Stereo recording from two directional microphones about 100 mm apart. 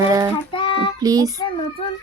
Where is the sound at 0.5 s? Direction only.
60° left (ahead or behind).